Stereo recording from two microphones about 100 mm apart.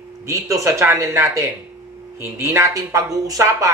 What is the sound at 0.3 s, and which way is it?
Speech, 30° right (ahead or behind).